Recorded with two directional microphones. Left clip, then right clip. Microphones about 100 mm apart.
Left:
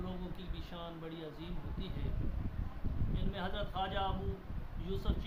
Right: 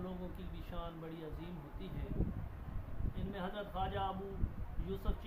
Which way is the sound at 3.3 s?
20° left (ahead or behind).